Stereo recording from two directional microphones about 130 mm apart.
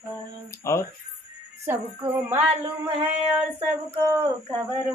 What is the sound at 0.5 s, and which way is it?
Speech, 20° left (ahead or behind).